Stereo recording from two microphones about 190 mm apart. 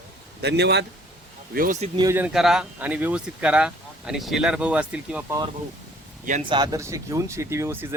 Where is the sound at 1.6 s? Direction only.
45° right (ahead or behind).